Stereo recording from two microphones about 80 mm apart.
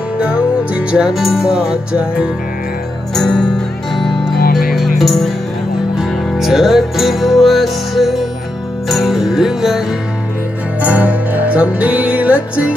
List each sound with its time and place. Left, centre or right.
0.2 s music: centre
3.2 s speech: centre
4.6 s music: centre
10.8 s music: right